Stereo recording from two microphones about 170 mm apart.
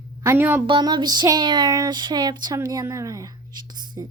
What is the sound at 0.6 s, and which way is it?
Child singing, 25° right (ahead or behind).